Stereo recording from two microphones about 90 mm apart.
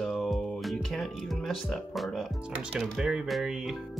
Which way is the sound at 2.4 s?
10° right (ahead or behind).